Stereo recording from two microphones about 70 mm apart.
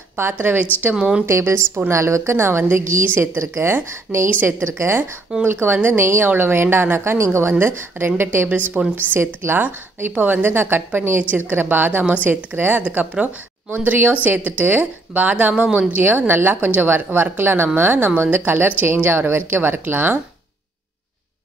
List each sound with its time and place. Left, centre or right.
0.2 s a woman's voice: right; by 15.9 s centre
15.9 s a woman's voice: right